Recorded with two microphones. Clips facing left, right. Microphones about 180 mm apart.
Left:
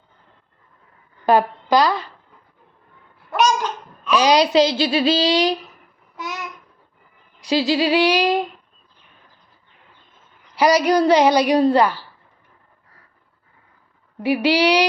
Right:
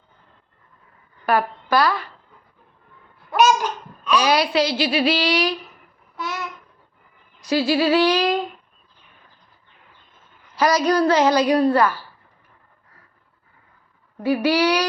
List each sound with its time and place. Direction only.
1.2 s a woman's voice: 20° left (ahead or behind)
3.3 s babbling: 5° right (ahead or behind)
4.1 s speech: 20° left (ahead or behind)
6.1 s babbling: 15° left (ahead or behind)
7.5 s a woman's voice: 20° left (ahead or behind)
10.5 s a woman's voice: 15° left (ahead or behind)
14.3 s a woman's voice: 15° left (ahead or behind)